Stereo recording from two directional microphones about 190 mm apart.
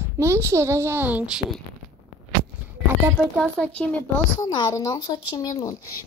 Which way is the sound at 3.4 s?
5° left (ahead or behind).